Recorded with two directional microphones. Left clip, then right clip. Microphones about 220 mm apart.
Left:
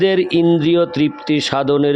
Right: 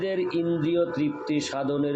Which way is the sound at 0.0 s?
50° left (ahead or behind).